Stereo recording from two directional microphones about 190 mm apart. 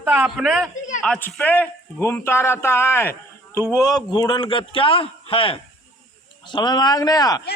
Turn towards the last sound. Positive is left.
turn(degrees=20)  # may be behind; listen again after turning